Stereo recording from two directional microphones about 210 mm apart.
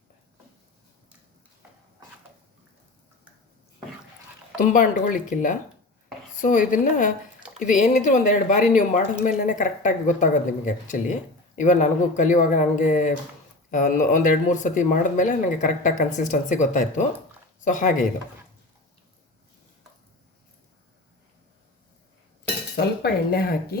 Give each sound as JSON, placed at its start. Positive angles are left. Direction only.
{"t": 4.5, "sound": "speech", "side_deg": 40}
{"t": 23.3, "sound": "speech", "side_deg": 45}